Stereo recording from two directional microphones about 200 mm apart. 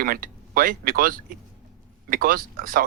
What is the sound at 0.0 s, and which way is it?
Speech, 45° right (ahead or behind).